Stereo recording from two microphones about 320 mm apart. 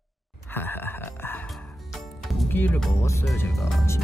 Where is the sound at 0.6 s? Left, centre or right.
Centre.